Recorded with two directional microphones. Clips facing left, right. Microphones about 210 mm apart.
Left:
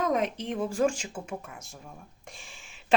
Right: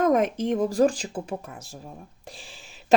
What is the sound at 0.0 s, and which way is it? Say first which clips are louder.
Speech: right 6 dB; 50° right (ahead or behind).